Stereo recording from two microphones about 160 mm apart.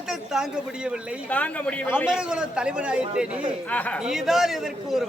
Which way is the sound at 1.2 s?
10° left (ahead or behind).